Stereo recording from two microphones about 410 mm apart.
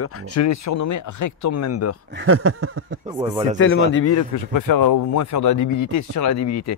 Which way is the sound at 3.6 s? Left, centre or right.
Left.